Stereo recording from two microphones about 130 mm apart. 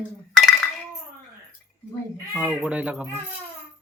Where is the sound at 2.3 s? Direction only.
5° right (ahead or behind).